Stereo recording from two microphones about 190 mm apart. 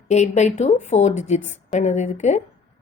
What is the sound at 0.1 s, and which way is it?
A woman's voice, 35° left (ahead or behind).